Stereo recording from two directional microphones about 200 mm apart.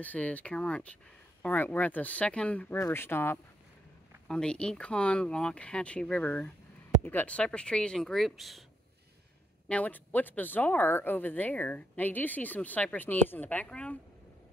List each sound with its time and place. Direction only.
0.0 s speech: 5° left (ahead or behind)
9.7 s speech: 5° left (ahead or behind)